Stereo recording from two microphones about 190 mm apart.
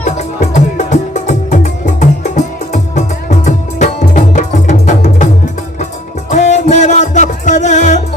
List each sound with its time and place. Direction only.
0.2 s music: 40° left (ahead or behind)
6.3 s music: 40° left (ahead or behind)